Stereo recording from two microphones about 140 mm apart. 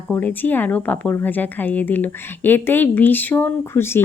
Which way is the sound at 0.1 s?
10° left (ahead or behind).